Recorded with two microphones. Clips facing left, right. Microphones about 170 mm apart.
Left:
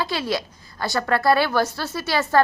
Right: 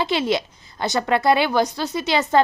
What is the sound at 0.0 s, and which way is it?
A woman's voice, 20° right (ahead or behind).